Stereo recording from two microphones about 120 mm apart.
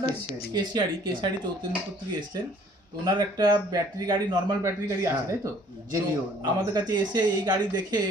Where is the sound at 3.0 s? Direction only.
35° right (ahead or behind).